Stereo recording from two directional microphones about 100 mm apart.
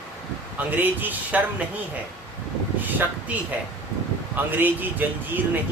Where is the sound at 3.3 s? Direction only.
15° right (ahead or behind).